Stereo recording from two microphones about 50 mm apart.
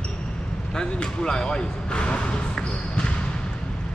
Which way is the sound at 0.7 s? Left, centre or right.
Centre.